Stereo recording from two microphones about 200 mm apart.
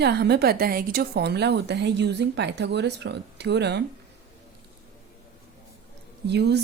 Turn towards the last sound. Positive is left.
turn(degrees=-55)  # may be behind; listen again after turning